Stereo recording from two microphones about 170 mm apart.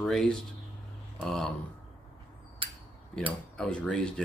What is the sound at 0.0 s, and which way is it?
Speech, centre (ahead or behind).